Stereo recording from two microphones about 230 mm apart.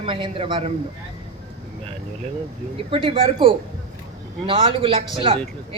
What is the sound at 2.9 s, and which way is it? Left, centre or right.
A man's voice, right.